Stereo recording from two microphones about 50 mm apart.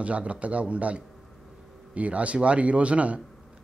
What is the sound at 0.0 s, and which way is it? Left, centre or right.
Speech, right.